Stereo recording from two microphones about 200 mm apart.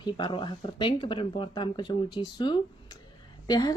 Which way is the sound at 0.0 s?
25° left (ahead or behind).